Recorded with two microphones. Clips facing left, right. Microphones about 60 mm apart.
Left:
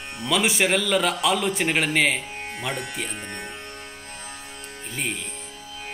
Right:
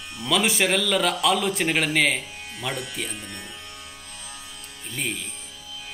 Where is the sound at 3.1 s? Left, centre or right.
Left.